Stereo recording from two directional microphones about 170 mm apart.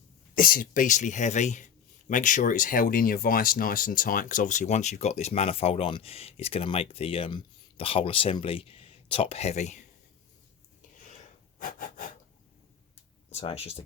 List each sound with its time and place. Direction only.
0.3 s a man's voice: 55° left (ahead or behind)
11.0 s a sound: 45° left (ahead or behind)
13.3 s speech: 35° left (ahead or behind)